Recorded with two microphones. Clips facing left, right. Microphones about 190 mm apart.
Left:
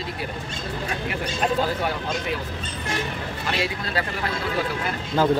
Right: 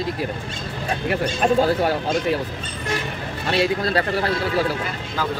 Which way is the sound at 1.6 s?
40° right (ahead or behind).